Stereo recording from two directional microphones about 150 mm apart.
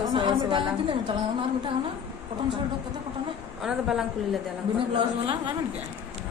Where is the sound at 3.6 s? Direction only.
5° right (ahead or behind).